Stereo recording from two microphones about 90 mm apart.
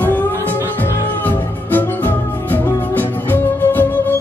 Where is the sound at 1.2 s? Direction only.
20° left (ahead or behind).